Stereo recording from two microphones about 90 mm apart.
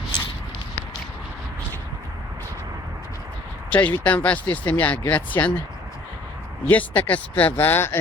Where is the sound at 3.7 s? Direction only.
15° left (ahead or behind).